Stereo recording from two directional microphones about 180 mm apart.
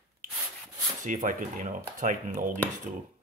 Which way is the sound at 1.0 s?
50° right (ahead or behind).